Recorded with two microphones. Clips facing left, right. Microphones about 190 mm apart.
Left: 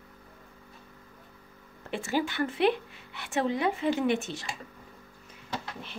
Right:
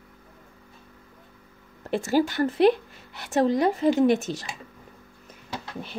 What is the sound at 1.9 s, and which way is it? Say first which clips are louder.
A woman's voice: right 7 dB; 40° right (ahead or behind).